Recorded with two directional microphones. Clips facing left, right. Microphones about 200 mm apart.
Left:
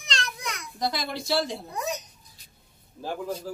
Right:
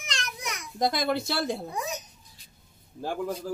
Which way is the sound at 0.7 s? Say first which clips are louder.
Right 5 dB; 50° right (ahead or behind).